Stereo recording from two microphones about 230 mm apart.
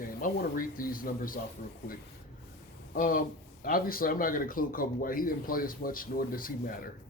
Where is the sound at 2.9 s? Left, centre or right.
Left.